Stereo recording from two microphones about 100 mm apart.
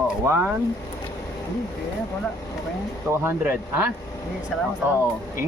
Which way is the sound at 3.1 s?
25° right (ahead or behind).